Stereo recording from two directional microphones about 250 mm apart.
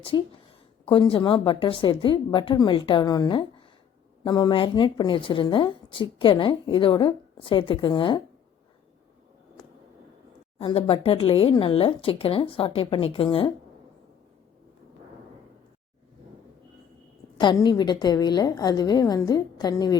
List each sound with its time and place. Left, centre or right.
0.1 s a woman's voice: centre
10.6 s a woman's voice: centre
17.3 s a woman's voice: centre